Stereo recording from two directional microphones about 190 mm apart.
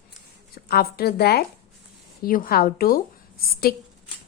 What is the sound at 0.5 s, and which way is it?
A woman's voice, 55° left (ahead or behind).